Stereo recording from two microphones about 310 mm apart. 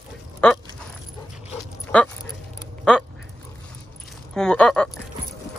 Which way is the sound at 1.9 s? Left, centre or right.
Centre.